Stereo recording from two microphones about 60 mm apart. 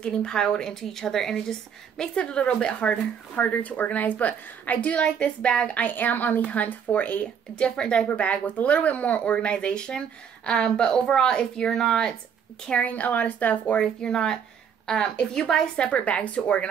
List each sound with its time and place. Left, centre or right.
0.0 s a woman's voice: centre
12.6 s a woman's voice: left